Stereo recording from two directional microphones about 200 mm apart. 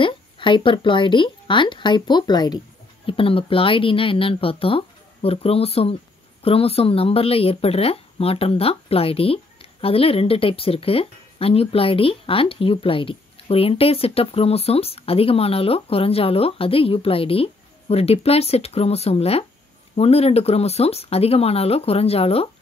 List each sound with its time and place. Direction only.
0.0 s speech: 25° left (ahead or behind)